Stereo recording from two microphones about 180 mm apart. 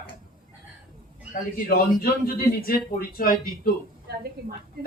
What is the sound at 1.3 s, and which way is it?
Speech, 50° left (ahead or behind).